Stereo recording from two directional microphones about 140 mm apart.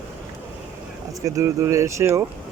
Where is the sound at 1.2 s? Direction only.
20° right (ahead or behind).